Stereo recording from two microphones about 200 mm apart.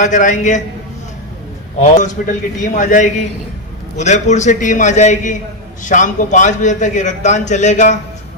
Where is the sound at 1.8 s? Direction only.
40° left (ahead or behind).